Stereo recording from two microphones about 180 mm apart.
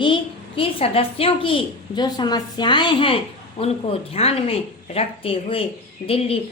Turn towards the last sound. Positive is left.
turn(degrees=30)  # may be behind; listen again after turning